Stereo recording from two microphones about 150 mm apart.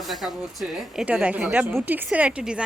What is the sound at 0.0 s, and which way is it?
Speech, centre (ahead or behind).